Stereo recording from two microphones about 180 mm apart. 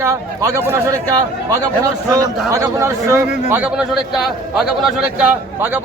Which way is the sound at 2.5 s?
15° right (ahead or behind).